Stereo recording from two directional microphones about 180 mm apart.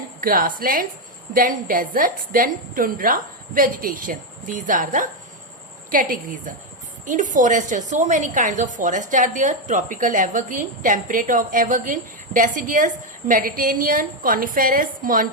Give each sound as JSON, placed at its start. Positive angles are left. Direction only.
{"t": 0.2, "sound": "a woman's voice", "side_deg": -50}